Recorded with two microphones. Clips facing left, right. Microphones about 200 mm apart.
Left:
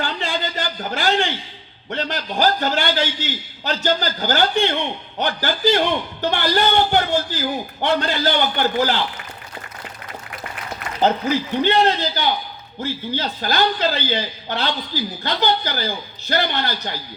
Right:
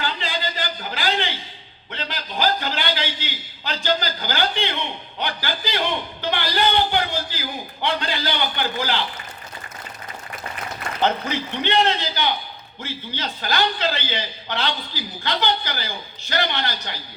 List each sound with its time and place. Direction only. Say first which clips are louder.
0.0 s a sound: left 3 dB; 50° left (ahead or behind)
1.9 s a man's voice: left 6 dB; 45° left (ahead or behind)
11.0 s a man's voice: left 4 dB; 40° left (ahead or behind)